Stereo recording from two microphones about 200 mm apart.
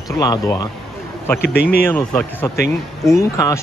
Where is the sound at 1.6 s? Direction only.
50° left (ahead or behind).